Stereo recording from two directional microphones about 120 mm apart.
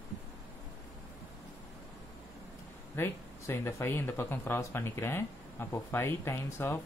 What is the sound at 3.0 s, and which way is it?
Speech, 20° left (ahead or behind).